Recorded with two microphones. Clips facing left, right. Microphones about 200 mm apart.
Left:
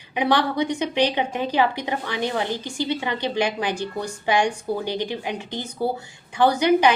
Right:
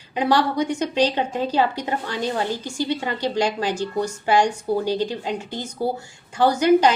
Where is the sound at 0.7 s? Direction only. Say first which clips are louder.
Right 1 dB; 15° left (ahead or behind).